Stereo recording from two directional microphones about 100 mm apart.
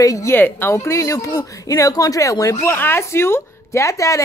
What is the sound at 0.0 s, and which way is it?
Speech, 30° left (ahead or behind).